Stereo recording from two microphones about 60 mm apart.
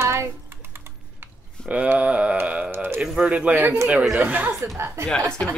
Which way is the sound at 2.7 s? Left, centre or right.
Right.